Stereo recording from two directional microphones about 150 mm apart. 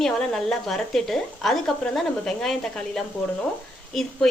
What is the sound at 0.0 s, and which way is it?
A woman's voice, 5° left (ahead or behind).